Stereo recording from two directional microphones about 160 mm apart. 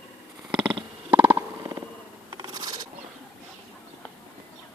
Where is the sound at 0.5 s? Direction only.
30° right (ahead or behind).